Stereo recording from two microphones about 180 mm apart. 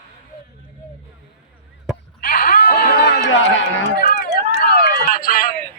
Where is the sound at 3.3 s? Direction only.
90° left.